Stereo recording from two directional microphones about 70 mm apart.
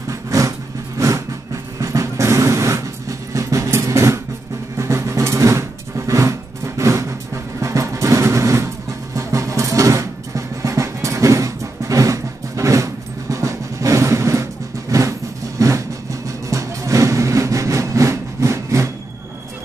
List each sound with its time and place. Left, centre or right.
0.1 s vehicle: right
4.7 s a sound: right
7.6 s vehicle: right